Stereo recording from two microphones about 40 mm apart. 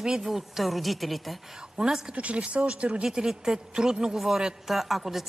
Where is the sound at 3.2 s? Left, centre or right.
Centre.